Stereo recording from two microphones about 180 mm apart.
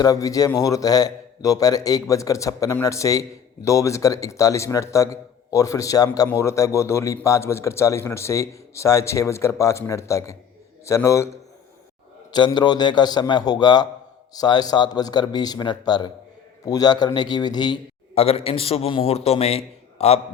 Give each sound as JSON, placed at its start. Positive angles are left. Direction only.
{"t": 0.0, "sound": "a man's voice", "side_deg": 20}
{"t": 12.3, "sound": "a man's voice", "side_deg": 25}